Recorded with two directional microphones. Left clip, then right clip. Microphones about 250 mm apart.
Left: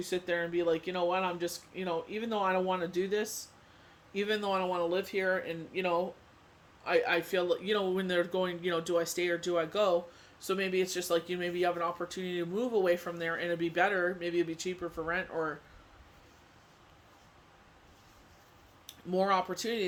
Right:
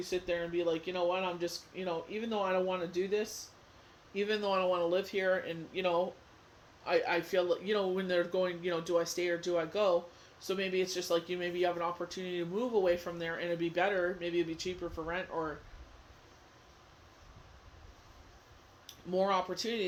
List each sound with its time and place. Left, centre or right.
0.0 s speech: left
18.9 s speech: centre